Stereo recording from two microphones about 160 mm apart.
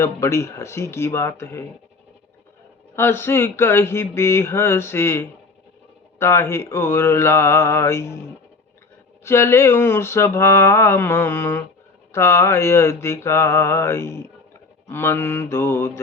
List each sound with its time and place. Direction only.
0.0 s speech: 15° left (ahead or behind)
2.9 s speech: 15° left (ahead or behind)
9.2 s speech: 15° left (ahead or behind)